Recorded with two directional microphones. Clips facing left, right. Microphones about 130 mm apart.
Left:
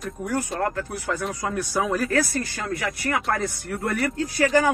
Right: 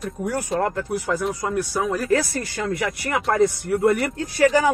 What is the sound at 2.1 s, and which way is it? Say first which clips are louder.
Speech: right 3 dB; 25° right (ahead or behind).